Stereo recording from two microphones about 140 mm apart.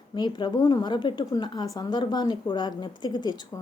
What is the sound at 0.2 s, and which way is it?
A woman's voice, 30° left (ahead or behind).